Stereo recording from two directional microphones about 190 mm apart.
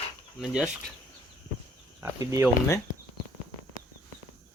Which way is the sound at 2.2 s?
20° right (ahead or behind).